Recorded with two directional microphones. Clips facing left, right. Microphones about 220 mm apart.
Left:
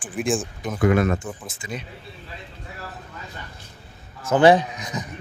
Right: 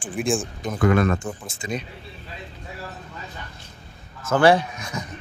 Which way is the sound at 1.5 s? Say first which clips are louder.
Right 4 dB; 25° right (ahead or behind).